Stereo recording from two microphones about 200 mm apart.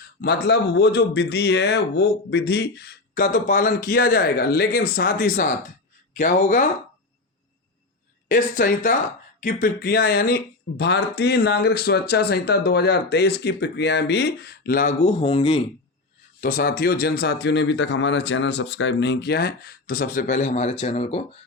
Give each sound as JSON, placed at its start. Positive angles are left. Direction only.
{"t": 0.2, "sound": "speech", "side_deg": 55}
{"t": 8.3, "sound": "speech", "side_deg": 45}
{"t": 15.0, "sound": "speech", "side_deg": 30}
{"t": 16.4, "sound": "speech", "side_deg": 45}